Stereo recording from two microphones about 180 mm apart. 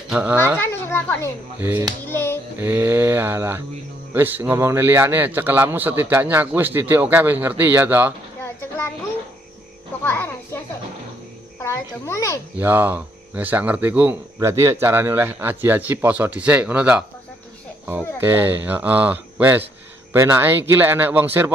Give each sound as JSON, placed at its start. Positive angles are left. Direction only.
{"t": 0.1, "sound": "speech", "side_deg": -10}
{"t": 0.6, "sound": "a child's voice", "side_deg": 10}
{"t": 1.6, "sound": "speech", "side_deg": -15}
{"t": 2.0, "sound": "music", "side_deg": 15}
{"t": 2.6, "sound": "speech", "side_deg": -10}
{"t": 10.0, "sound": "a child's voice", "side_deg": 10}
{"t": 11.6, "sound": "a child's voice", "side_deg": 15}
{"t": 12.5, "sound": "speech", "side_deg": -10}